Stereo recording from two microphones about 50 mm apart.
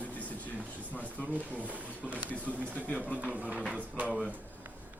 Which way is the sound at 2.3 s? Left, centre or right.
Left.